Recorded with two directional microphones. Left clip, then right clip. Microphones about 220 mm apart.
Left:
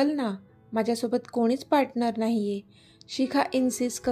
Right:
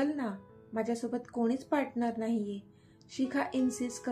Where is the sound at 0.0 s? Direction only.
40° left (ahead or behind).